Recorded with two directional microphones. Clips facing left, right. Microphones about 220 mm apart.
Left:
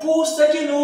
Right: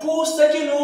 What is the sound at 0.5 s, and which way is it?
Speech, centre (ahead or behind).